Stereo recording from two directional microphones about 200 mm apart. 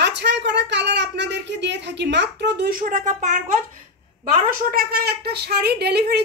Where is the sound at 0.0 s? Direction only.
60° right (ahead or behind).